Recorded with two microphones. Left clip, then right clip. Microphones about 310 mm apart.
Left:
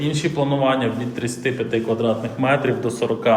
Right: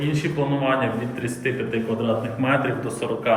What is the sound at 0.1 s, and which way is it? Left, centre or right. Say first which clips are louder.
Speech: left 4 dB; centre.